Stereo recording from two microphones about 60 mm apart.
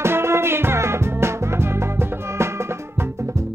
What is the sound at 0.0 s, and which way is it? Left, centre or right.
Music, right.